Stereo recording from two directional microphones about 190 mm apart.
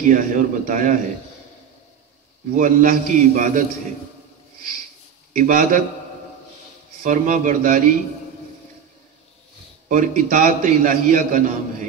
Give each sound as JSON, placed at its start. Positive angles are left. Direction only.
{"t": 0.0, "sound": "a man's voice", "side_deg": -45}
{"t": 2.5, "sound": "a man's voice", "side_deg": -45}
{"t": 5.3, "sound": "a man's voice", "side_deg": -45}
{"t": 7.0, "sound": "a man's voice", "side_deg": -45}
{"t": 9.8, "sound": "a man's voice", "side_deg": -45}